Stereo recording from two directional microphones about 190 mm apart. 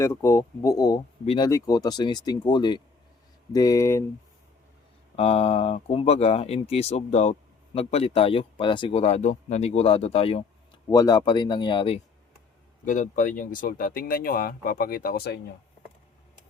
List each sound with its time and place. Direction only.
0.0 s speech: 15° left (ahead or behind)
1.2 s speech: 30° left (ahead or behind)
1.5 s speech: 15° left (ahead or behind)
5.1 s speech: 30° left (ahead or behind)
10.8 s speech: 20° left (ahead or behind)
12.8 s speech: 40° left (ahead or behind)